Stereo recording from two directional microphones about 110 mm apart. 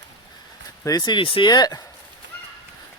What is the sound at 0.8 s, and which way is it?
Speech, 35° left (ahead or behind).